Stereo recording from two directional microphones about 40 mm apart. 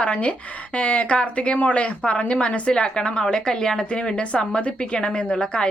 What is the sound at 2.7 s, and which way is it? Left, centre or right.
A woman's voice, left.